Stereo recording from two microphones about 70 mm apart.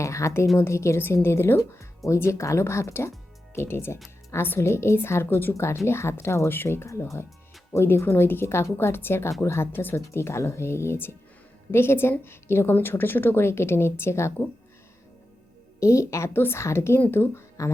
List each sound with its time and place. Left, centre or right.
0.0 s speech: left
15.8 s speech: left